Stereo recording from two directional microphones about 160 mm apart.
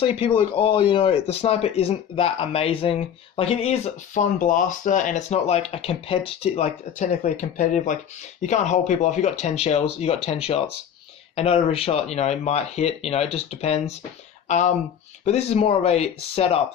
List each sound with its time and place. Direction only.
0.0 s speech: 35° left (ahead or behind)
4.1 s speech: 55° left (ahead or behind)
15.2 s speech: 40° left (ahead or behind)